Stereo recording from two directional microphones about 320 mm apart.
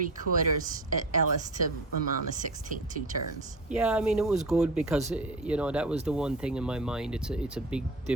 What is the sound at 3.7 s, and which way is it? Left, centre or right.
Speech, centre.